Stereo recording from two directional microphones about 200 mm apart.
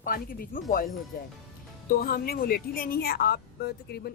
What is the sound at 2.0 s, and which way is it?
Speech, 50° left (ahead or behind).